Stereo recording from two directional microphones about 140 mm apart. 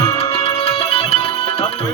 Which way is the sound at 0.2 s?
45° left (ahead or behind).